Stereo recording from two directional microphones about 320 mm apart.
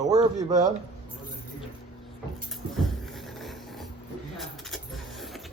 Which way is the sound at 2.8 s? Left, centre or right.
Centre.